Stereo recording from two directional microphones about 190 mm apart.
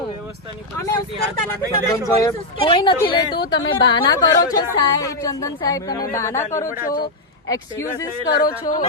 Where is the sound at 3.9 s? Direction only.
25° left (ahead or behind).